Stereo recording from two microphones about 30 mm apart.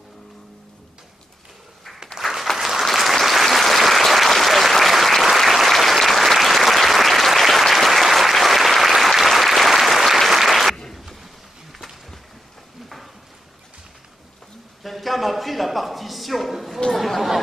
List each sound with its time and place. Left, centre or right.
2.2 s applause: right
2.5 s applause: centre
14.8 s a sound: centre
16.9 s chatter: centre